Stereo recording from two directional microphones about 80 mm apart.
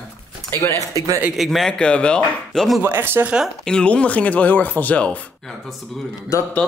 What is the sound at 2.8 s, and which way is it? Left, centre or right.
Speech, right.